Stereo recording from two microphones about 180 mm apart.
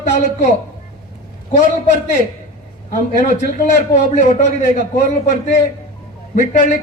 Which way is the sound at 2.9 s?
45° left (ahead or behind).